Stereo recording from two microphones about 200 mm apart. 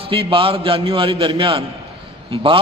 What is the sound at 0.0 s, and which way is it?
A man's voice, 25° right (ahead or behind).